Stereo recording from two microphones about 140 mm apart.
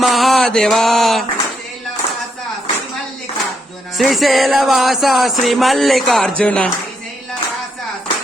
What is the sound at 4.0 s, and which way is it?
Speech, centre (ahead or behind).